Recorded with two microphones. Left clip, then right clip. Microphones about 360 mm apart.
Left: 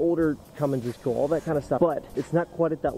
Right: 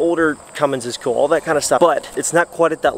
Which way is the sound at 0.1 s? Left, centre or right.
Centre.